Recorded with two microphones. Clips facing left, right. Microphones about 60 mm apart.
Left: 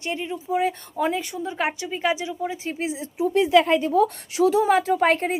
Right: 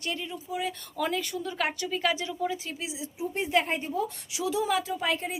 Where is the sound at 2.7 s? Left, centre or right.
Left.